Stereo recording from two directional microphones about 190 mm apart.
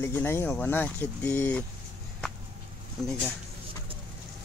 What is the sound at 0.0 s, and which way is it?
Speech, 10° left (ahead or behind).